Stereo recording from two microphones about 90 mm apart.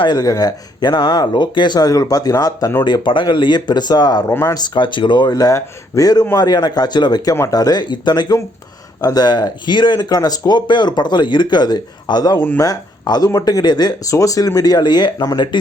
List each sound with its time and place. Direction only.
0.0 s speech: 50° left (ahead or behind)
2.8 s speech: 60° left (ahead or behind)
4.3 s speech: 30° left (ahead or behind)
4.5 s speech: 50° left (ahead or behind)
10.7 s speech: 55° left (ahead or behind)
14.1 s speech: 40° left (ahead or behind)